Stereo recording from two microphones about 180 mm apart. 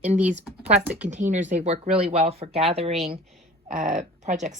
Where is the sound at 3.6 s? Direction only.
45° right (ahead or behind).